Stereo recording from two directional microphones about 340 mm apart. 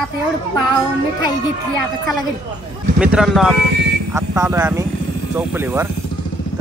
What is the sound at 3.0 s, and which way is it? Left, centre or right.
Speech, centre.